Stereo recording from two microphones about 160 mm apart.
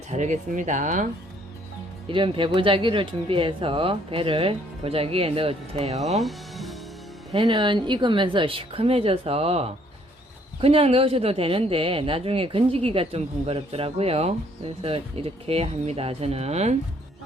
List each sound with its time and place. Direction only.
0.1 s speech: 50° right (ahead or behind)
2.0 s speech: 35° right (ahead or behind)
6.0 s music: centre (ahead or behind)
7.3 s speech: 30° right (ahead or behind)